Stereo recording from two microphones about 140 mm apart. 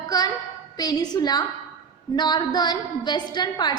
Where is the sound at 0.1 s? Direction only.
25° left (ahead or behind).